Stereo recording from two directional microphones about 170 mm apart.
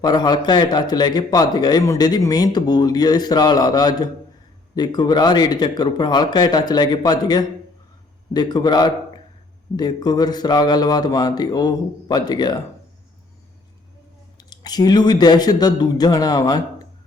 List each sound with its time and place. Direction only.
0.0 s a man's voice: 25° left (ahead or behind)
14.3 s a man's voice: 25° left (ahead or behind)